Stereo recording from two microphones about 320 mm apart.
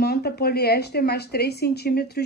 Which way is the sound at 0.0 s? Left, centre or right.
Left.